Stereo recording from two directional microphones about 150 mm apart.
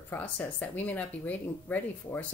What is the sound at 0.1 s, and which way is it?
Speech, 10° left (ahead or behind).